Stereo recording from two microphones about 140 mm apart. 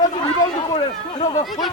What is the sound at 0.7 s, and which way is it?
Speech, 35° left (ahead or behind).